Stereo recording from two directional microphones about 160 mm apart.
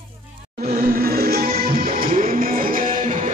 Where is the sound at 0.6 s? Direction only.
60° right (ahead or behind).